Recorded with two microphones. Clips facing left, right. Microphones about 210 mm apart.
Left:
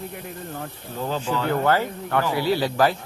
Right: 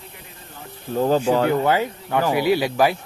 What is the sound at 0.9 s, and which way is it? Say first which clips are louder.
Speech: right 9 dB; 45° right (ahead or behind).